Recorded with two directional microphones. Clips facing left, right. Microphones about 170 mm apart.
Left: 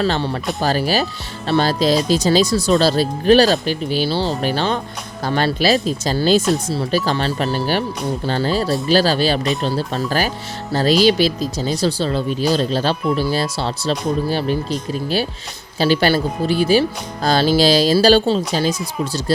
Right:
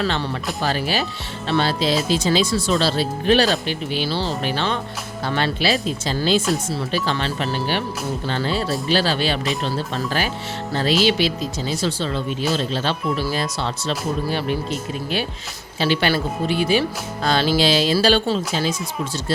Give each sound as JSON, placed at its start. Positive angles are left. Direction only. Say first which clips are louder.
{"t": 0.0, "sound": "speech", "louder": "left 4 dB", "side_deg": 30}
{"t": 6.4, "sound": "speech", "louder": "left 4 dB", "side_deg": 0}
{"t": 6.7, "sound": "speech", "louder": "left 4 dB", "side_deg": 40}
{"t": 9.4, "sound": "speech", "louder": "left 4 dB", "side_deg": 0}
{"t": 10.1, "sound": "speech", "louder": "left 3 dB", "side_deg": 40}
{"t": 13.1, "sound": "speech", "louder": "left 4 dB", "side_deg": -5}
{"t": 13.3, "sound": "speech", "louder": "left 3 dB", "side_deg": 35}
{"t": 15.8, "sound": "speech", "louder": "left 4 dB", "side_deg": 40}